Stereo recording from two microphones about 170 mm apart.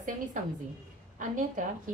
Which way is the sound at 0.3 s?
50° right (ahead or behind).